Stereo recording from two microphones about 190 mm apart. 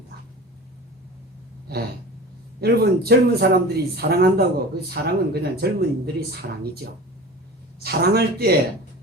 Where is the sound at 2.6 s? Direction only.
55° right (ahead or behind).